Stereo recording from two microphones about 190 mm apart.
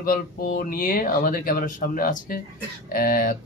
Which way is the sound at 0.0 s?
50° left (ahead or behind).